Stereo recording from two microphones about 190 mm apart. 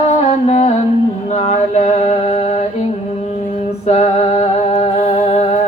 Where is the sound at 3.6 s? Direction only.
35° left (ahead or behind).